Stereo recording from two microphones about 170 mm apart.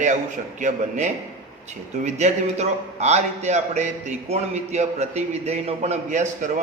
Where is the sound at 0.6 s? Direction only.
45° right (ahead or behind).